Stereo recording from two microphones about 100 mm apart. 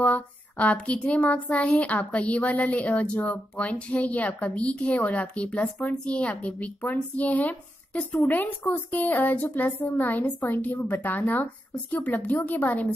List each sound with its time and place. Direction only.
0.0 s a woman's voice: 15° left (ahead or behind)